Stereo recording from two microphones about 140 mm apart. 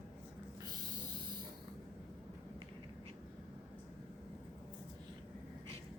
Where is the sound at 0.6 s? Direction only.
30° right (ahead or behind).